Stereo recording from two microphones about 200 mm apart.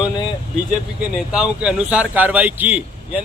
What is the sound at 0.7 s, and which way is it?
Speech, 5° right (ahead or behind).